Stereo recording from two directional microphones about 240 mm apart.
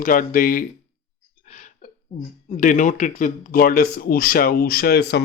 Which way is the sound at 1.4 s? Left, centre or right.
Left.